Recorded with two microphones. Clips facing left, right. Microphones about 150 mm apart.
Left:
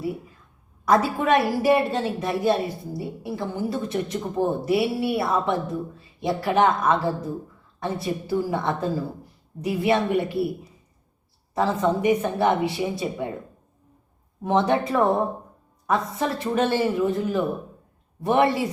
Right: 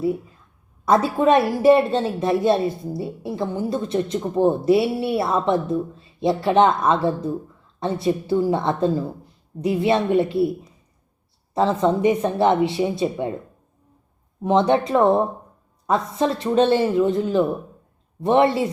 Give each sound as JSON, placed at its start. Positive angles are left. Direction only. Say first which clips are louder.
{"t": 0.9, "sound": "a woman's voice", "louder": "right 3 dB", "side_deg": -25}
{"t": 11.5, "sound": "a woman's voice", "louder": "right 3 dB", "side_deg": -25}
{"t": 14.4, "sound": "a woman's voice", "louder": "right 3 dB", "side_deg": -20}